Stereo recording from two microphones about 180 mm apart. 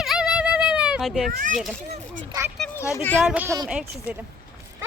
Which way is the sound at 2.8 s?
15° left (ahead or behind).